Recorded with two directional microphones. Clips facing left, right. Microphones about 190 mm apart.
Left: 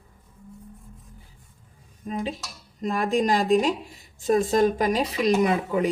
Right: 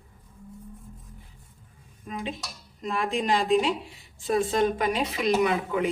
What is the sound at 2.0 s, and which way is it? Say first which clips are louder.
A woman's voice: left 4 dB; 35° left (ahead or behind).